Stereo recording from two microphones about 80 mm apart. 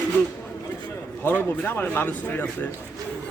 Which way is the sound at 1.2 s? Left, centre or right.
Left.